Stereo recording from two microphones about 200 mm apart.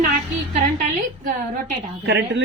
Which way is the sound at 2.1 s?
60° right (ahead or behind).